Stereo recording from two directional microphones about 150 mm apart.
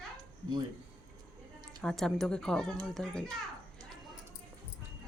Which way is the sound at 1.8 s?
5° left (ahead or behind).